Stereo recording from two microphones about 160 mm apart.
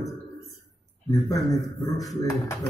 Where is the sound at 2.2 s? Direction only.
20° left (ahead or behind).